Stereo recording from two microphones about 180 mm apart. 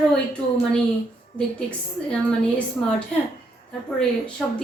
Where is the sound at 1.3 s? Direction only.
5° left (ahead or behind).